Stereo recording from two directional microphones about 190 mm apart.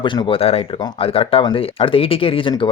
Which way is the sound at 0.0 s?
25° left (ahead or behind).